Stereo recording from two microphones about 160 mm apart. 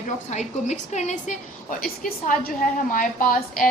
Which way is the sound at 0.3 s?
45° left (ahead or behind).